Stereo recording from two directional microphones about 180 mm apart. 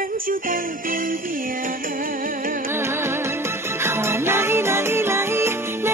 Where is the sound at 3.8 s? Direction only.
15° right (ahead or behind).